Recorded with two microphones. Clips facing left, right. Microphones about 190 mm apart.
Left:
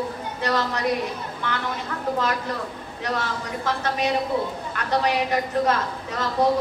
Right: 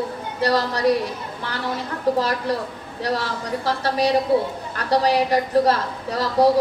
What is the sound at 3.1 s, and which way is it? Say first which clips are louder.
A woman's voice: right 3 dB; 35° right (ahead or behind).